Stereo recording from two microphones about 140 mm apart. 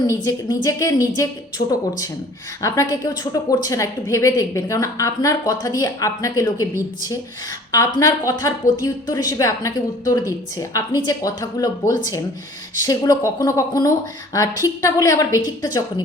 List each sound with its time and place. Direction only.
0.3 s a woman's voice: 25° left (ahead or behind)
7.7 s a woman's voice: 20° left (ahead or behind)